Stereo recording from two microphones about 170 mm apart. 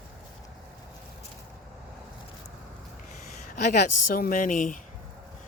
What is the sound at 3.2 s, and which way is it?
Speech, 45° left (ahead or behind).